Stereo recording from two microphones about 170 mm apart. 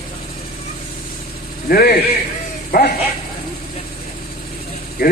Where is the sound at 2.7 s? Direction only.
60° left (ahead or behind).